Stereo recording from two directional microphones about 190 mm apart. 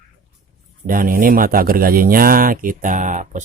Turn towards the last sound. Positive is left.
turn(degrees=-40)  # may be behind; listen again after turning